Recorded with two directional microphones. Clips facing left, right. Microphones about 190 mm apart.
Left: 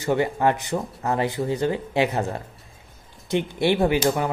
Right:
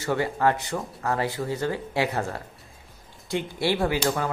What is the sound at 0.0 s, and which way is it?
Speech, 20° left (ahead or behind).